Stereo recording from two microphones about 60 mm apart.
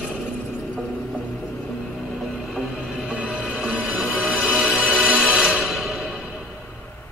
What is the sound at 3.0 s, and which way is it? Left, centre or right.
Music, centre.